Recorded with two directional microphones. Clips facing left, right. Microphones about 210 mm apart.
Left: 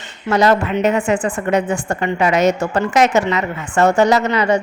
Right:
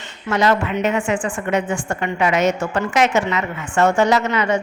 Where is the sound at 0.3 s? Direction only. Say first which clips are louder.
Left 3 dB; 40° left (ahead or behind).